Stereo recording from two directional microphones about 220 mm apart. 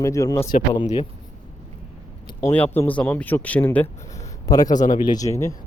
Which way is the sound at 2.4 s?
10° left (ahead or behind).